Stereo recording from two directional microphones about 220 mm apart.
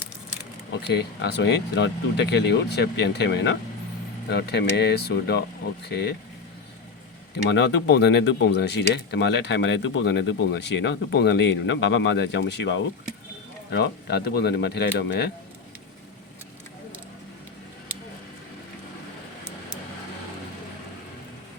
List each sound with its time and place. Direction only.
0.7 s speech: 50° left (ahead or behind)
7.5 s speech: 50° left (ahead or behind)